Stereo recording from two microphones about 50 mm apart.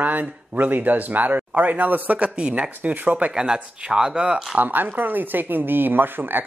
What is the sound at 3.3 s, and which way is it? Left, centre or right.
Speech, centre.